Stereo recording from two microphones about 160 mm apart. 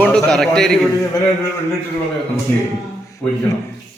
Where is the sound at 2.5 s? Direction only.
15° left (ahead or behind).